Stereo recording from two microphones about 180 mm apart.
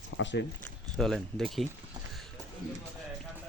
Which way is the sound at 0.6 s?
Centre (ahead or behind).